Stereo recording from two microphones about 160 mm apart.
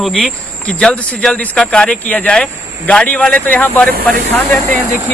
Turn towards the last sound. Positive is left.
turn(degrees=5)  # may be behind; listen again after turning